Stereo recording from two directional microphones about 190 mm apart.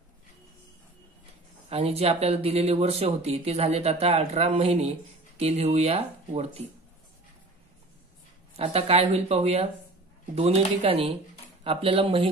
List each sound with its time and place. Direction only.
1.7 s speech: 30° right (ahead or behind)
8.5 s speech: 30° right (ahead or behind)